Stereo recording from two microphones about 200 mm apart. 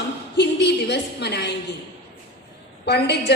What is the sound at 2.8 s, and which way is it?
Speech, 55° left (ahead or behind).